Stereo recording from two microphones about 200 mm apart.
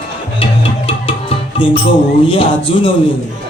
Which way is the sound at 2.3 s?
25° left (ahead or behind).